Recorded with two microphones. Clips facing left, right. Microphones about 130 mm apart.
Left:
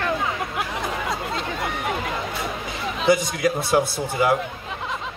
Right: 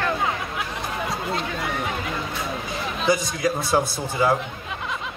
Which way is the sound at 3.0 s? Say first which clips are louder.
Left 3 dB; 25° left (ahead or behind).